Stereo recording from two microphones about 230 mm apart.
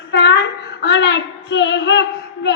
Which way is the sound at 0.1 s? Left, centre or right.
Left.